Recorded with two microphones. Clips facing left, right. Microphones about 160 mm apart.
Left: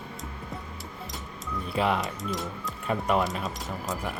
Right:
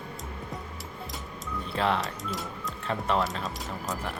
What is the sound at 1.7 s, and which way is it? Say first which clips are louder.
Speech: left 1 dB; 10° left (ahead or behind).